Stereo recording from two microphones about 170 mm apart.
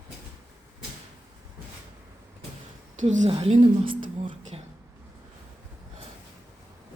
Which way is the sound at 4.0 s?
45° right (ahead or behind).